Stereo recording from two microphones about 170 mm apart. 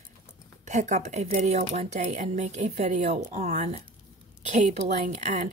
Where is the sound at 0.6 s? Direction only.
45° right (ahead or behind).